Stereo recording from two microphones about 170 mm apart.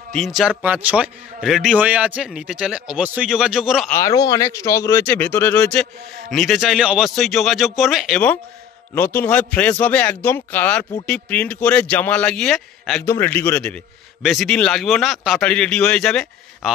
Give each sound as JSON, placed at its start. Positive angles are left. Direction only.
{"t": 0.1, "sound": "a man's voice", "side_deg": 0}
{"t": 3.9, "sound": "a man's voice", "side_deg": 20}
{"t": 8.9, "sound": "a man's voice", "side_deg": 10}
{"t": 13.0, "sound": "a man's voice", "side_deg": 15}